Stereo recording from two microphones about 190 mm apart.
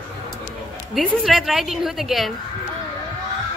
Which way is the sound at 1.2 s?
Centre (ahead or behind).